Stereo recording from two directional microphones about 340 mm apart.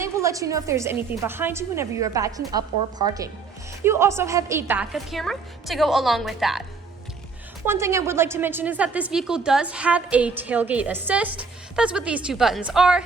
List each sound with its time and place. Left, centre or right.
0.0 s a woman's voice: centre
7.6 s a woman's voice: centre